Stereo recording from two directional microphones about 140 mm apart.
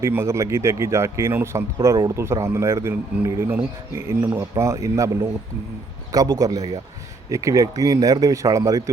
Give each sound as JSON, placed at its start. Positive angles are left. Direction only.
{"t": 0.0, "sound": "speech", "side_deg": -20}